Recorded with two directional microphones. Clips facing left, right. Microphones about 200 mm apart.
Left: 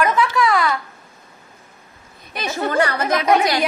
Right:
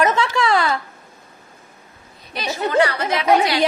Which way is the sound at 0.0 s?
25° right (ahead or behind).